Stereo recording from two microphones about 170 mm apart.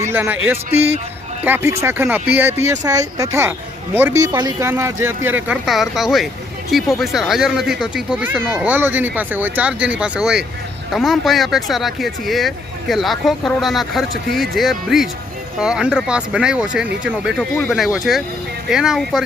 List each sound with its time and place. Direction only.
0.1 s speech: 10° right (ahead or behind)